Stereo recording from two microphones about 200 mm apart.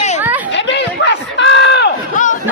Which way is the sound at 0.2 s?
10° right (ahead or behind).